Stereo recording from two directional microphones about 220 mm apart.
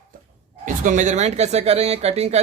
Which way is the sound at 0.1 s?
40° right (ahead or behind).